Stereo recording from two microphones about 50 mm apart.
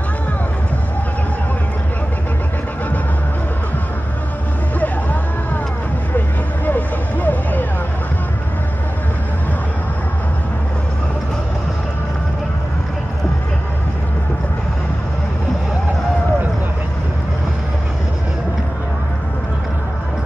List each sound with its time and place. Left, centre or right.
6.1 s vehicle: left